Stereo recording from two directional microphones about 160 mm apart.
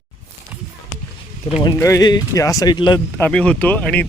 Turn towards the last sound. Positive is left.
turn(degrees=10)  # may be behind; listen again after turning